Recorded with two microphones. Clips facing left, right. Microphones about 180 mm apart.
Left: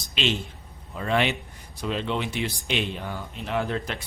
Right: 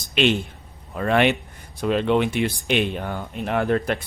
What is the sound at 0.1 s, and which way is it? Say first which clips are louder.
A man's voice: right 7 dB; 55° right (ahead or behind).